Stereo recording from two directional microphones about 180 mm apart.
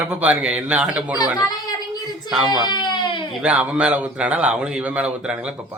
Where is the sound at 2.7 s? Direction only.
25° left (ahead or behind).